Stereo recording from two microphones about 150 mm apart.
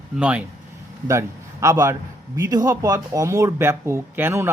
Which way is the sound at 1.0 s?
20° right (ahead or behind).